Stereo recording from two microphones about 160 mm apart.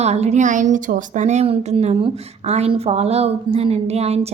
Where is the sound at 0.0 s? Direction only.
45° right (ahead or behind).